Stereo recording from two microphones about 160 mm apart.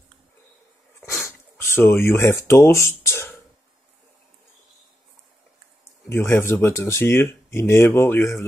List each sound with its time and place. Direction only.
1.1 s speech: 15° left (ahead or behind)
6.0 s speech: 15° left (ahead or behind)